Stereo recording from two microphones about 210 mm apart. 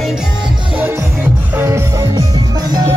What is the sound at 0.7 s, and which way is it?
Music, 10° right (ahead or behind).